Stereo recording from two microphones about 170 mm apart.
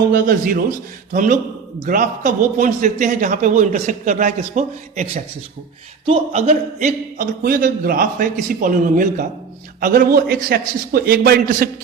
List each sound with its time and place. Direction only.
0.1 s a man's voice: 55° right (ahead or behind)